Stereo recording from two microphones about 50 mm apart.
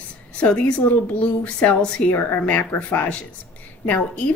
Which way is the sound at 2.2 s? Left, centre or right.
Left.